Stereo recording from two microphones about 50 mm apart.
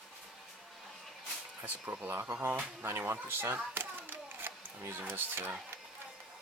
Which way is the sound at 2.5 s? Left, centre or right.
Right.